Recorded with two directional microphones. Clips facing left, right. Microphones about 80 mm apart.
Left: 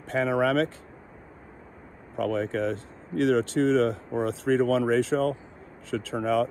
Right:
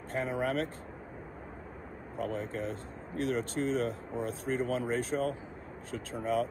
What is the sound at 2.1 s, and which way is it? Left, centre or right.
Speech, left.